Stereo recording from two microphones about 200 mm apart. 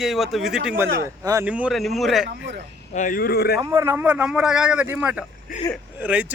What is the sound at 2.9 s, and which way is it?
Speech, 40° left (ahead or behind).